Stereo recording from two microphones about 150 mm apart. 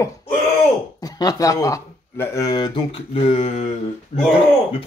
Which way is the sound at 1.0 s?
25° left (ahead or behind).